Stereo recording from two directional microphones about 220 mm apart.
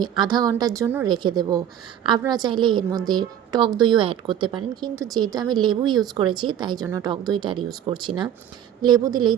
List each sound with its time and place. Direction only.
0.0 s a woman's voice: 20° right (ahead or behind)